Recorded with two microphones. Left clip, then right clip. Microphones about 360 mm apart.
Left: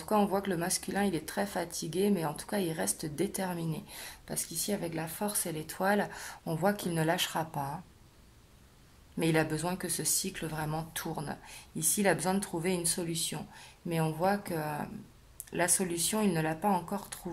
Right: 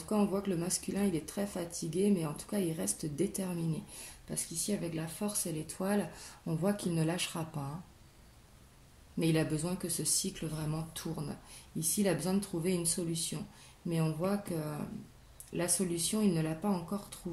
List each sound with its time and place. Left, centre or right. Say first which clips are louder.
0.1 s speech: left 4 dB; left
9.2 s speech: left 3 dB; left